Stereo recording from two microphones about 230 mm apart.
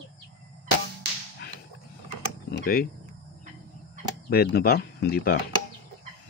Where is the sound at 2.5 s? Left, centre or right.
Left.